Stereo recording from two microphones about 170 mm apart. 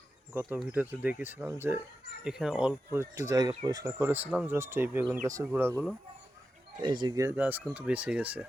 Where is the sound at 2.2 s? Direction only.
5° right (ahead or behind).